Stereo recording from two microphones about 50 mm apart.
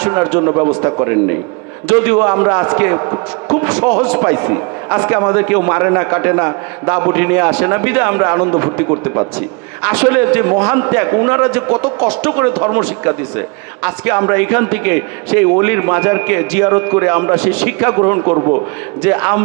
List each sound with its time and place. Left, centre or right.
0.4 s a man's voice: right
11.5 s a man's voice: right
12.4 s a man's voice: right
19.0 s a man's voice: right